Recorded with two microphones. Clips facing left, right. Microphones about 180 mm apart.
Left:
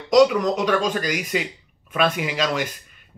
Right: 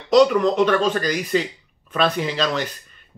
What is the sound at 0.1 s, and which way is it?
A man's voice, 10° left (ahead or behind).